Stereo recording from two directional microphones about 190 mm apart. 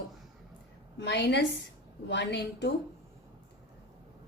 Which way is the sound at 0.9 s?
65° left (ahead or behind).